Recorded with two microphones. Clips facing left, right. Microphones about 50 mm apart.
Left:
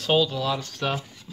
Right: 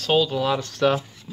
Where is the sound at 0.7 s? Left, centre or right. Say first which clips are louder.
Right 7 dB; right.